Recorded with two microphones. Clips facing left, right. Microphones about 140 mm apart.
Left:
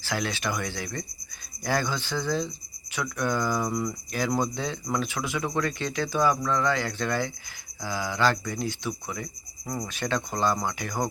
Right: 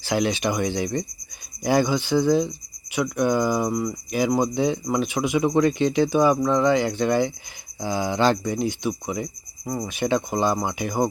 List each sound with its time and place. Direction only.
0.0 s speech: 20° right (ahead or behind)